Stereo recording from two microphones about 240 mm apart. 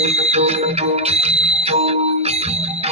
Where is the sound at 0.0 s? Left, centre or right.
Right.